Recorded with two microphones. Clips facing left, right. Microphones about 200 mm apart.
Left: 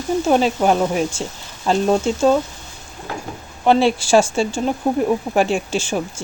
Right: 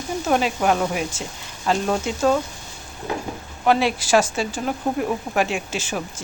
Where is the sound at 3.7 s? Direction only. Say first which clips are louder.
Left 4 dB; 30° left (ahead or behind).